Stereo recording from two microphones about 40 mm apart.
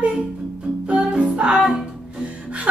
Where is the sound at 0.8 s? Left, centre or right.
Right.